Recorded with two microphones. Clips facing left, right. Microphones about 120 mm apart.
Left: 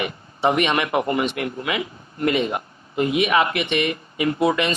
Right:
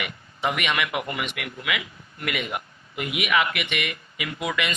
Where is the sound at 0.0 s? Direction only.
30° left (ahead or behind).